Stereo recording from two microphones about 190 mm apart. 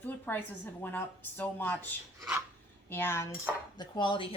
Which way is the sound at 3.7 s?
25° left (ahead or behind).